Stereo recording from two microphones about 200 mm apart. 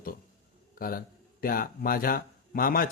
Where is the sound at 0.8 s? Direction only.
45° left (ahead or behind).